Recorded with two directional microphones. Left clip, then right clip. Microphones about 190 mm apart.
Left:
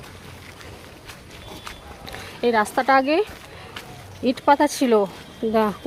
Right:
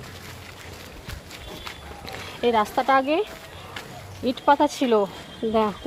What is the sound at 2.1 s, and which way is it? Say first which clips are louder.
Speech: left 1 dB; 15° left (ahead or behind).